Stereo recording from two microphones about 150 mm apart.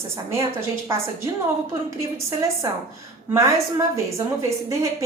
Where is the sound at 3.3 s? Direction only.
20° right (ahead or behind).